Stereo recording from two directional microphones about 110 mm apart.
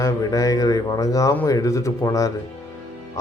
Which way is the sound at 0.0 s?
30° left (ahead or behind).